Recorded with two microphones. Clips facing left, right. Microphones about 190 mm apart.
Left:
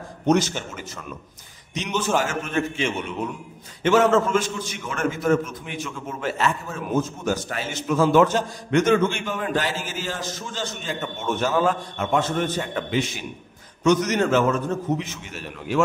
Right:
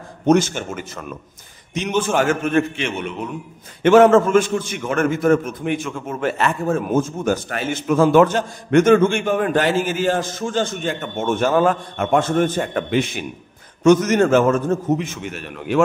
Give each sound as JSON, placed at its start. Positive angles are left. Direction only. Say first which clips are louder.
{"t": 0.3, "sound": "a man's voice", "louder": "right 4 dB", "side_deg": -50}